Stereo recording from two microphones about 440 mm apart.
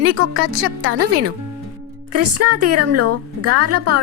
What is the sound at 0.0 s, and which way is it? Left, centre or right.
A woman's voice, right.